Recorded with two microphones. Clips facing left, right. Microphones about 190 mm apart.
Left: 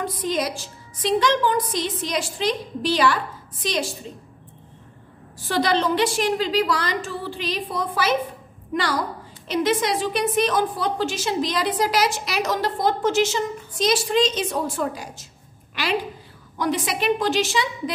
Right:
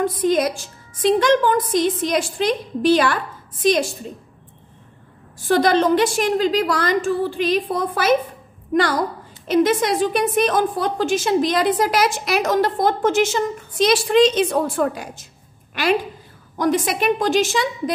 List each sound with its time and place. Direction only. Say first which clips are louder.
0.0 s a woman's voice: right 7 dB; 50° right (ahead or behind)
5.5 s a woman's voice: right 5 dB; 50° right (ahead or behind)
9.5 s a woman's voice: right 5 dB; 50° right (ahead or behind)